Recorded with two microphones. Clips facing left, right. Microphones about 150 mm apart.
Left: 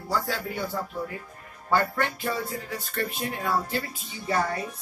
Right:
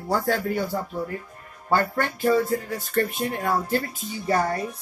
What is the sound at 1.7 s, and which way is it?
Speech, 40° right (ahead or behind).